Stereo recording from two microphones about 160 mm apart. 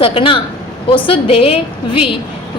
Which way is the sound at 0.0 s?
35° left (ahead or behind).